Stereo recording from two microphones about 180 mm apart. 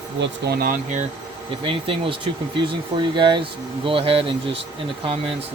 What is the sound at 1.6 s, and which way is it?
Speech, 30° right (ahead or behind).